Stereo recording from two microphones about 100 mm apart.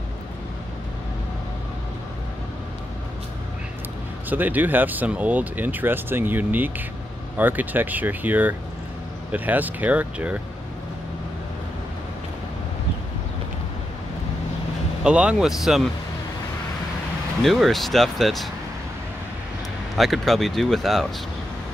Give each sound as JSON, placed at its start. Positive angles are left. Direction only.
{"t": 4.3, "sound": "speech", "side_deg": -20}
{"t": 15.0, "sound": "speech", "side_deg": -10}
{"t": 17.4, "sound": "speech", "side_deg": 0}
{"t": 20.0, "sound": "speech", "side_deg": 0}